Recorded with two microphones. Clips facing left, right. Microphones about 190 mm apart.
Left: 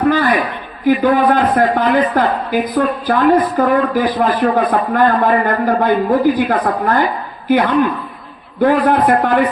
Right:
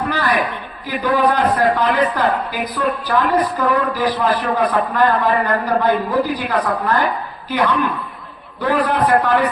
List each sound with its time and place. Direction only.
0.1 s a man's voice: 50° left (ahead or behind)